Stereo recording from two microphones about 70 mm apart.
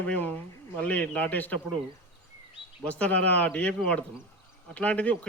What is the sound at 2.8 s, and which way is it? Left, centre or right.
A man's voice, centre.